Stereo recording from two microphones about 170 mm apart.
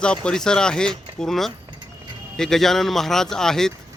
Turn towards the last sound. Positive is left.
turn(degrees=5)  # may be behind; listen again after turning